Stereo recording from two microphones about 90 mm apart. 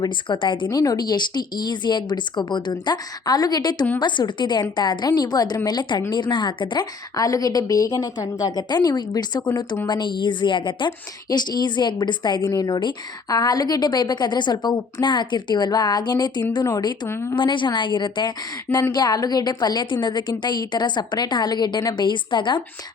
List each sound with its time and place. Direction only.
0.0 s a woman's voice: 60° left (ahead or behind)
0.7 s a woman's voice: 45° left (ahead or behind)
7.2 s a woman's voice: 40° left (ahead or behind); by 10.9 s 60° left (ahead or behind)
11.3 s a woman's voice: 50° left (ahead or behind)
12.5 s speech: 45° left (ahead or behind)
17.3 s a woman's voice: 60° left (ahead or behind)